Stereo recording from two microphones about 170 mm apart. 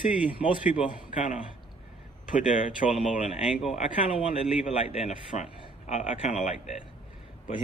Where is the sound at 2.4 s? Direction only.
45° left (ahead or behind).